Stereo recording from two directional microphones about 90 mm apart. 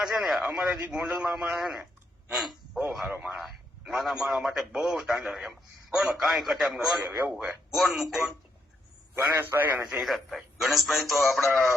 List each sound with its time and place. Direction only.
0.0 s a man's voice: centre (ahead or behind)
9.1 s a man's voice: 25° right (ahead or behind)
9.9 s a man's voice: centre (ahead or behind)